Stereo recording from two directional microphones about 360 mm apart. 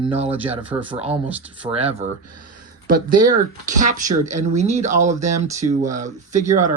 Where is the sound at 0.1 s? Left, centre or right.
Centre.